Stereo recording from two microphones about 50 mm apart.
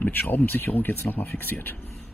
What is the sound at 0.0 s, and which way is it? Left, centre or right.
Speech, left.